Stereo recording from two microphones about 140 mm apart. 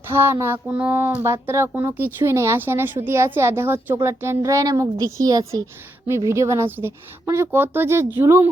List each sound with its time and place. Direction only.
0.1 s speech: 20° right (ahead or behind)